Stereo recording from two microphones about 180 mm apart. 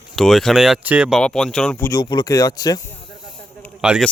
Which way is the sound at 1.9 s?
25° left (ahead or behind).